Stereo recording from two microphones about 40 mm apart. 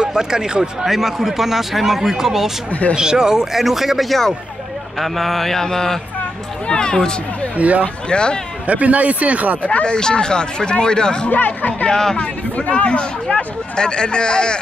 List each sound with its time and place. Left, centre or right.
0.0 s speech: centre
0.8 s a man's voice: centre
7.5 s speech: right
8.1 s speech: left
8.6 s speech: right
9.7 s speech: left
11.2 s speech: left
11.9 s speech: centre
12.2 s speech: left